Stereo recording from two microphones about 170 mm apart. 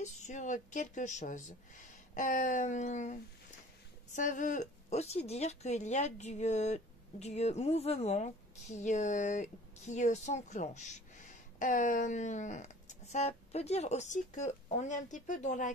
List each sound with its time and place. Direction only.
0.0 s speech: 45° left (ahead or behind)